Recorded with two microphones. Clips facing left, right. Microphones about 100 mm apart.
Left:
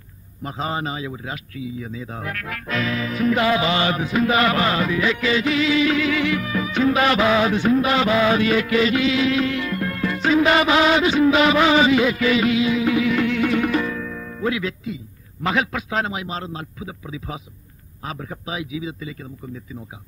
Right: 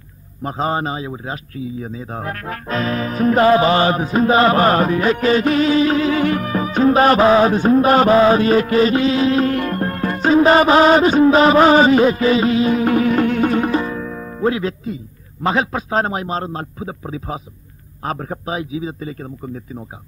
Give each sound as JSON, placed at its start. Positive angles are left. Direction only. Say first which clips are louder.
{"t": 0.4, "sound": "a man's voice", "louder": "right 6 dB", "side_deg": -40}